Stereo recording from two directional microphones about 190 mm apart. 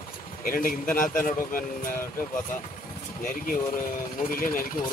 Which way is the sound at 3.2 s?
45° left (ahead or behind).